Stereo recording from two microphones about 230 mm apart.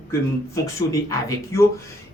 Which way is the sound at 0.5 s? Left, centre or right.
Centre.